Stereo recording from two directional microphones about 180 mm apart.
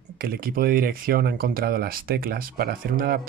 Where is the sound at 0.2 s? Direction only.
55° right (ahead or behind).